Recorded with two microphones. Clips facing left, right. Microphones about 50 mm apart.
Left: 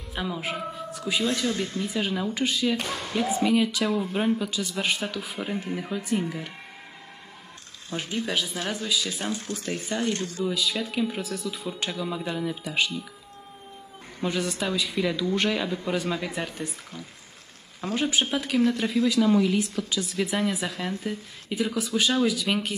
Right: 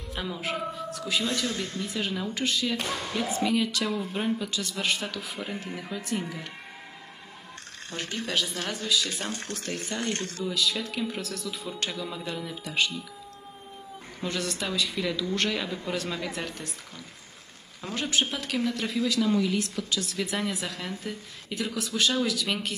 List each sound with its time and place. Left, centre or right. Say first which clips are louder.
0.1 s music: left 2 dB; centre
0.8 s a sound: left 4 dB; centre
1.2 s speech: left 3 dB; centre
7.9 s speech: left 2 dB; centre
10.1 s speech: left 3 dB; right
10.4 s speech: left 1 dB; centre
14.2 s speech: left 4 dB; centre
17.8 s speech: left 3 dB; centre